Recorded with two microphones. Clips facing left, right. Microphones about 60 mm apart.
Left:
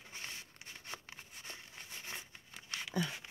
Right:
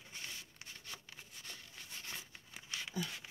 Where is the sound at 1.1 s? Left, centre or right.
Left.